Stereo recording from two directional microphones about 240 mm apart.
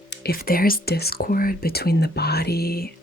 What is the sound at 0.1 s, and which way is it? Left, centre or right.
Speech, left.